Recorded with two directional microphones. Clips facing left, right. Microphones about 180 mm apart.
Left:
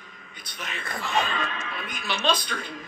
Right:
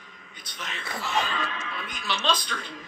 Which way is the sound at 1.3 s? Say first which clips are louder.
Left 1 dB; 55° left (ahead or behind).